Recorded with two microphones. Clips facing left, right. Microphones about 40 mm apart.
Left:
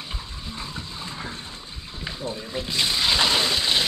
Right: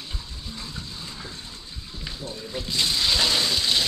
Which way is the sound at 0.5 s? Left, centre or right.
Left.